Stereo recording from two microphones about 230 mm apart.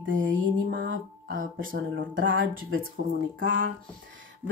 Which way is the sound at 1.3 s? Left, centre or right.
Right.